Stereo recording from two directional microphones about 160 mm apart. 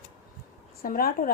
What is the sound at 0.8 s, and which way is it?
Speech, 65° left (ahead or behind).